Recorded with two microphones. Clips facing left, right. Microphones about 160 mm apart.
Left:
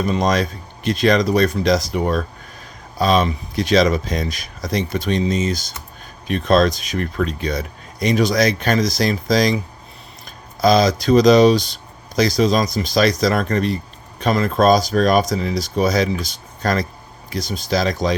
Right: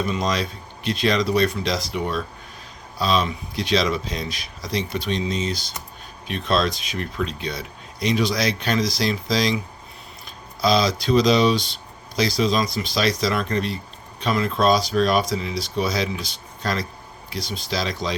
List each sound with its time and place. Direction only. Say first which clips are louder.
0.0 s speech: left 5 dB; 45° left (ahead or behind)